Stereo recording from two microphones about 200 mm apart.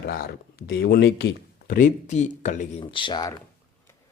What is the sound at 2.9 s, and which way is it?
Speech, 25° left (ahead or behind).